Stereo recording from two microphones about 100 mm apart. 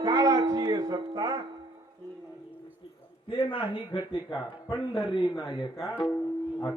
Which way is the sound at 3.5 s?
60° left (ahead or behind).